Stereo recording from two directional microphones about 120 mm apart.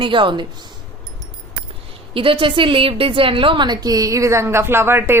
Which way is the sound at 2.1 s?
45° right (ahead or behind).